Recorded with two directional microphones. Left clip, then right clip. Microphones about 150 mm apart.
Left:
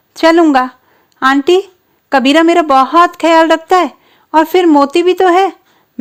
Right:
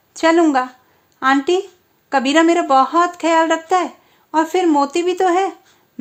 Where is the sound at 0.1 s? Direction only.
40° left (ahead or behind).